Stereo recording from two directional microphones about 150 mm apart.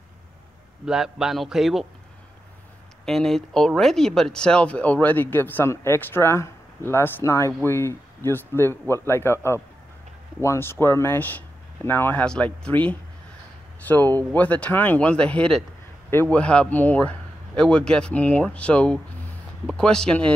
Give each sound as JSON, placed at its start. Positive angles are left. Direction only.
{"t": 0.8, "sound": "a man's voice", "side_deg": -5}
{"t": 3.1, "sound": "a man's voice", "side_deg": 0}